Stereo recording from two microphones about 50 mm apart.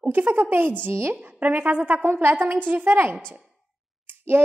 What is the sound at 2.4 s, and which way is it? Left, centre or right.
Speech, right.